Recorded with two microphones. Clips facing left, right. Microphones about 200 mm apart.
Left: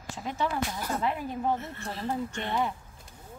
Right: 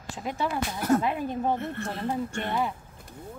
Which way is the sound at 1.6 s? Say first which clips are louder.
Right 4 dB; 55° right (ahead or behind).